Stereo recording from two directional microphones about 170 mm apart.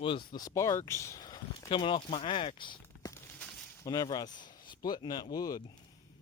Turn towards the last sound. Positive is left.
turn(degrees=20)  # may be behind; listen again after turning